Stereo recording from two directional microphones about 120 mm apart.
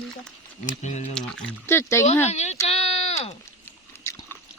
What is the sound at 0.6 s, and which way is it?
Speech, 80° left.